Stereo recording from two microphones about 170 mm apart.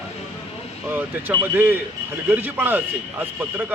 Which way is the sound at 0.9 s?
10° right (ahead or behind).